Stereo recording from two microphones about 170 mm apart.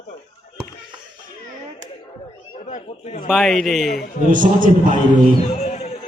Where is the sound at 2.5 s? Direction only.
40° left (ahead or behind).